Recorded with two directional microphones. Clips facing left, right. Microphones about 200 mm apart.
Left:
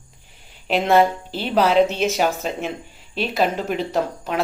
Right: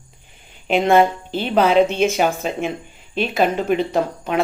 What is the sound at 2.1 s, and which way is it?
Speech, centre (ahead or behind).